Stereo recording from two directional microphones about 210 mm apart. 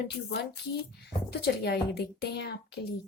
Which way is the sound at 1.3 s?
50° left (ahead or behind).